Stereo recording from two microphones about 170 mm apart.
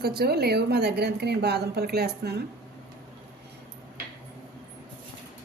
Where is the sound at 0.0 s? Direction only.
70° right (ahead or behind).